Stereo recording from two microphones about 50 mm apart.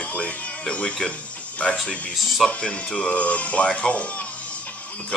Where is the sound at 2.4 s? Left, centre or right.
Centre.